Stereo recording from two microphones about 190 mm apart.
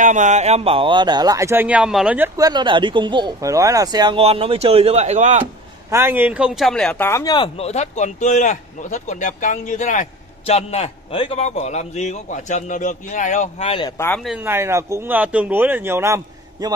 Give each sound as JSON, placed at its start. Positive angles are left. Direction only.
{"t": 0.0, "sound": "speech", "side_deg": -40}
{"t": 5.9, "sound": "speech", "side_deg": -10}
{"t": 13.9, "sound": "speech", "side_deg": 10}
{"t": 14.2, "sound": "speech", "side_deg": -10}